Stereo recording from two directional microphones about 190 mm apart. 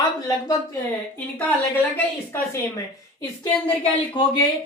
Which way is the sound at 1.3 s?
10° left (ahead or behind).